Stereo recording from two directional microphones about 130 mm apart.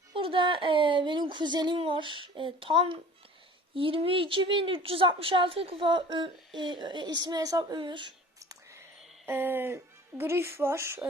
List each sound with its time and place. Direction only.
0.2 s a woman's voice: 40° right (ahead or behind)
8.4 s whispering: 25° right (ahead or behind)
9.2 s speech: 15° right (ahead or behind)